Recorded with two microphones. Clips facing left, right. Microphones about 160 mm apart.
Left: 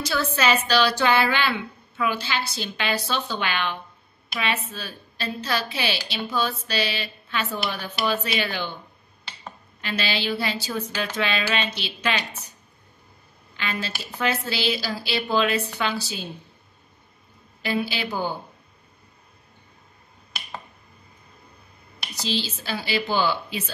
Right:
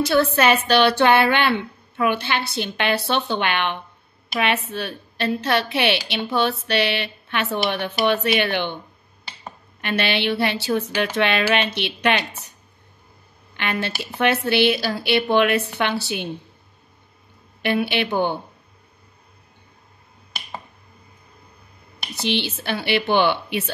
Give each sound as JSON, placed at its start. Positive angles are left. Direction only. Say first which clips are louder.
{"t": 0.0, "sound": "speech", "louder": "right 6 dB", "side_deg": -60}
{"t": 9.8, "sound": "speech", "louder": "right 5 dB", "side_deg": -60}
{"t": 13.6, "sound": "speech", "louder": "right 5 dB", "side_deg": -60}
{"t": 17.6, "sound": "speech", "louder": "right 5 dB", "side_deg": -65}
{"t": 22.2, "sound": "speech", "louder": "right 4 dB", "side_deg": -65}